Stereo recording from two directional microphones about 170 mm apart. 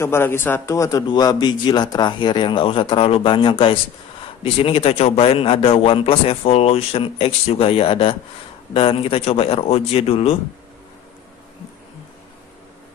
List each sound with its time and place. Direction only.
0.0 s a man's voice: 15° left (ahead or behind); by 10.3 s 35° left (ahead or behind)